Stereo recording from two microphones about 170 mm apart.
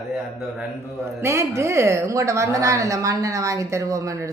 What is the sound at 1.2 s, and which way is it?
A woman's voice, 15° right (ahead or behind).